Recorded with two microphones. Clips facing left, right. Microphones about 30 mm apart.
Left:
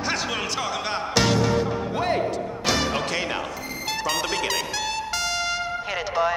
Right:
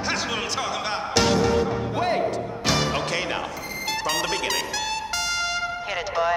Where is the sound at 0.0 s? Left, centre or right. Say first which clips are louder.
Even; centre.